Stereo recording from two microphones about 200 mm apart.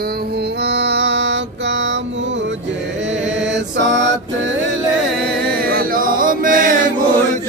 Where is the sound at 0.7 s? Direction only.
60° right (ahead or behind).